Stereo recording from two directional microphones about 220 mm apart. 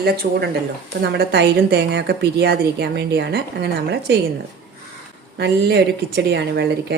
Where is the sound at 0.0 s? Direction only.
45° right (ahead or behind).